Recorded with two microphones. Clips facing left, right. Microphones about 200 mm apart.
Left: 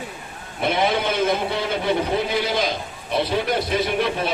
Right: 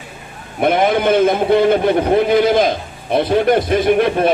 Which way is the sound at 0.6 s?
50° right (ahead or behind).